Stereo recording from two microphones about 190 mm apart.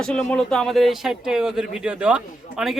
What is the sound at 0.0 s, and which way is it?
Speech, 5° left (ahead or behind).